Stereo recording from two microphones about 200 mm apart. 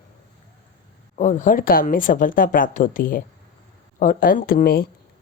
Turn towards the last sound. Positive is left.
turn(degrees=45)  # may be behind; listen again after turning